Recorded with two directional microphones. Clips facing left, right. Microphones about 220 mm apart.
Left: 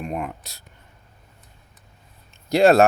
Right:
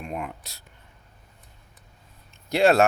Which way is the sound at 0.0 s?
45° left (ahead or behind).